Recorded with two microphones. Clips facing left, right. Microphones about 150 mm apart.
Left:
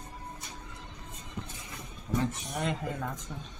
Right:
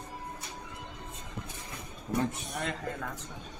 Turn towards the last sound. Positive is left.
turn(degrees=10)  # may be behind; listen again after turning